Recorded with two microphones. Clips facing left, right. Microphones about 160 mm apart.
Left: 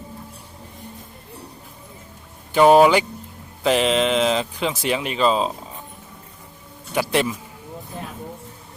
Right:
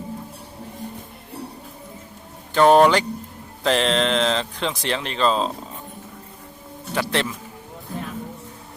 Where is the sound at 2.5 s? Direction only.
10° left (ahead or behind).